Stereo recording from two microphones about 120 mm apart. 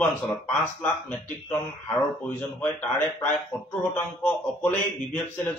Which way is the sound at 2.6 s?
15° left (ahead or behind).